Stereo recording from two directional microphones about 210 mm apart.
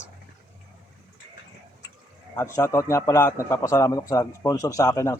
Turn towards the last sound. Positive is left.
turn(degrees=15)  # may be behind; listen again after turning